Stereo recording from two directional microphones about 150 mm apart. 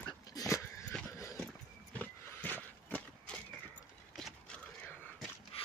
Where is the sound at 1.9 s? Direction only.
10° left (ahead or behind).